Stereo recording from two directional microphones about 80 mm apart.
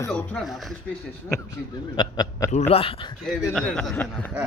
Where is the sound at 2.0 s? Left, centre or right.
Left.